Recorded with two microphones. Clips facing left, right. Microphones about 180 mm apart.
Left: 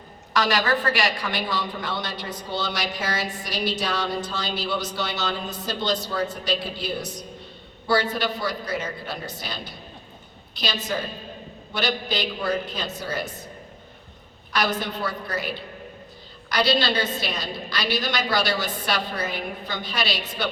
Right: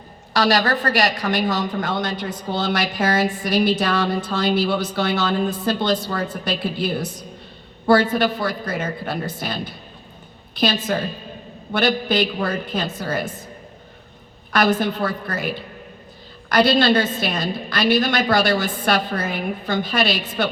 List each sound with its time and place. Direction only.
0.3 s a woman's voice: 35° right (ahead or behind)
14.5 s a woman's voice: 50° right (ahead or behind)